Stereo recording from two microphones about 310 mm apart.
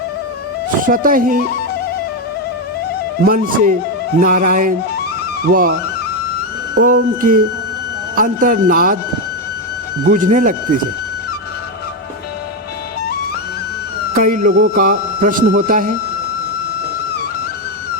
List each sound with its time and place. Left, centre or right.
0.9 s speech: right
3.2 s speech: right
6.7 s speech: right
10.1 s speech: right
14.1 s speech: right